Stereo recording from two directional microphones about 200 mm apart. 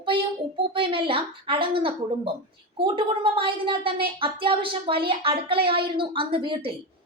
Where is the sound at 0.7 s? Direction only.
25° right (ahead or behind).